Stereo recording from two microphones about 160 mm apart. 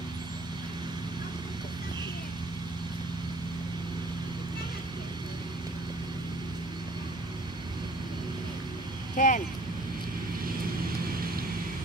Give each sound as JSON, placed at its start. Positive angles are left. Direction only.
{"t": 9.1, "sound": "vehicle", "side_deg": 50}